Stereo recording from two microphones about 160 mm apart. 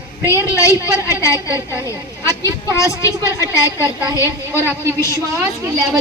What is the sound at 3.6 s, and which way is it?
A woman's voice, 25° right (ahead or behind).